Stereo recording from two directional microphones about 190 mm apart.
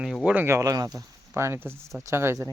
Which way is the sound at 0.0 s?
5° right (ahead or behind).